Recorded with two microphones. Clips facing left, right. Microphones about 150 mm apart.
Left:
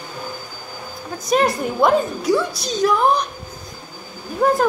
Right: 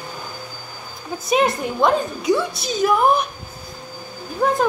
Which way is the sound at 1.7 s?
5° left (ahead or behind).